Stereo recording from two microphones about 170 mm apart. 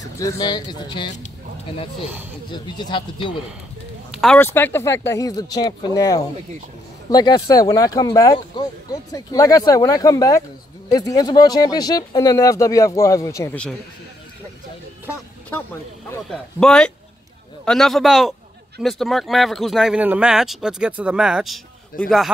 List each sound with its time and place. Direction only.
0.2 s speech: 20° left (ahead or behind)
2.5 s speech: 25° left (ahead or behind)
4.1 s a sound: centre (ahead or behind)
4.4 s speech: 10° left (ahead or behind)
15.5 s speech: 15° left (ahead or behind); by 21.5 s 5° right (ahead or behind)